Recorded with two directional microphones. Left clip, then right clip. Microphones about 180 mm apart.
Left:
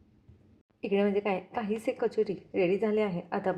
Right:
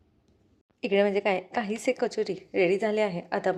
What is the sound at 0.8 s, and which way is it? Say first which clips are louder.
A woman's voice: right 4 dB; 25° right (ahead or behind).